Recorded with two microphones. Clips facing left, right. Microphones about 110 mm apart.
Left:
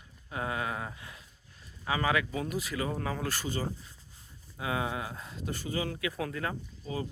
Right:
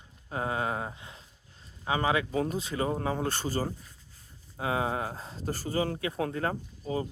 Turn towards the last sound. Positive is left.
turn(degrees=-35)  # may be behind; listen again after turning